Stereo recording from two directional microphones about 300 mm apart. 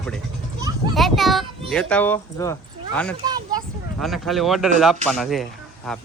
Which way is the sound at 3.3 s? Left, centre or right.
Centre.